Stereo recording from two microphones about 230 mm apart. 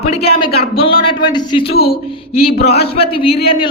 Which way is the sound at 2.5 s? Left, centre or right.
Left.